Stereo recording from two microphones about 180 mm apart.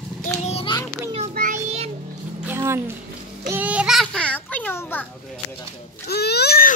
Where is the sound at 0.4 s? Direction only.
35° left (ahead or behind).